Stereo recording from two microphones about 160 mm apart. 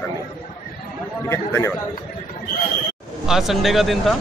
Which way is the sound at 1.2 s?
15° left (ahead or behind).